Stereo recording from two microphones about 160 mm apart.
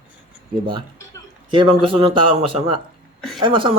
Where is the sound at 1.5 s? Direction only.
30° right (ahead or behind).